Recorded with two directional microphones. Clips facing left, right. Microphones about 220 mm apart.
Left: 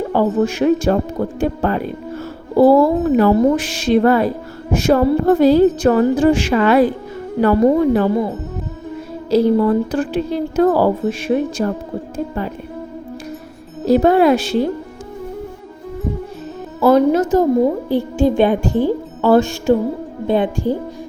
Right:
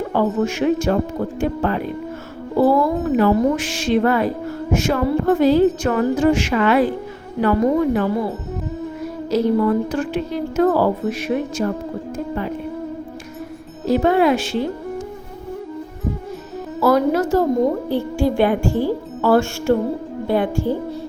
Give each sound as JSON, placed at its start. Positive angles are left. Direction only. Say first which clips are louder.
{"t": 0.2, "sound": "a woman's voice", "louder": "left 3 dB", "side_deg": 35}
{"t": 9.3, "sound": "a woman's voice", "louder": "left 4 dB", "side_deg": 30}
{"t": 13.8, "sound": "a woman's voice", "louder": "left 4 dB", "side_deg": 40}
{"t": 16.8, "sound": "a woman's voice", "louder": "left 4 dB", "side_deg": 25}